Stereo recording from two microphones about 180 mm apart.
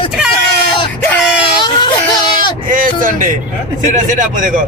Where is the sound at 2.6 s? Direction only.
50° right (ahead or behind).